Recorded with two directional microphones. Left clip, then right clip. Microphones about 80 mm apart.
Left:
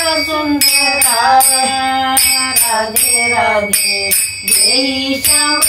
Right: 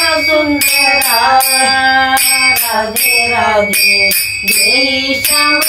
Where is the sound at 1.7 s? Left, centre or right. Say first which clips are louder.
Right 5 dB; left.